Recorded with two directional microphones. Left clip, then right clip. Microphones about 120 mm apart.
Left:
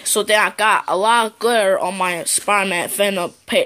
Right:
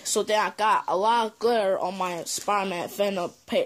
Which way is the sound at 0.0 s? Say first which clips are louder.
Left 6 dB; 15° right (ahead or behind).